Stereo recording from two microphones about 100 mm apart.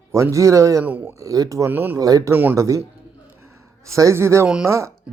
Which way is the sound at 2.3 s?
20° right (ahead or behind).